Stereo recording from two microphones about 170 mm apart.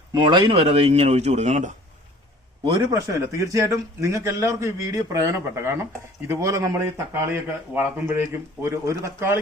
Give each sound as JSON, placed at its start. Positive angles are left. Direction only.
{"t": 0.1, "sound": "speech", "side_deg": -25}
{"t": 2.9, "sound": "a man's voice", "side_deg": -20}